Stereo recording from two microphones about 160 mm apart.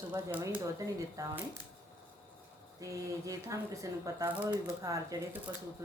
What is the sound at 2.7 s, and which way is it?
Speech, 20° right (ahead or behind).